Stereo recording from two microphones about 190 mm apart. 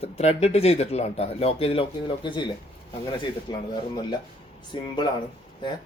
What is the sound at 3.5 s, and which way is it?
Speech, 25° left (ahead or behind).